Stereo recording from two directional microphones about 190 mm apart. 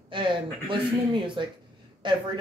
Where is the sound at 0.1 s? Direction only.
25° right (ahead or behind).